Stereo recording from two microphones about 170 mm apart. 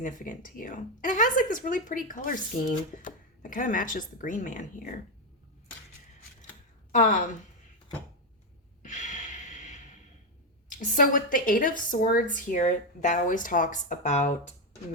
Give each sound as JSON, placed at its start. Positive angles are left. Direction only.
{"t": 0.0, "sound": "speech", "side_deg": 50}
{"t": 6.9, "sound": "speech", "side_deg": 55}
{"t": 8.8, "sound": "snort", "side_deg": 45}
{"t": 10.7, "sound": "speech", "side_deg": 50}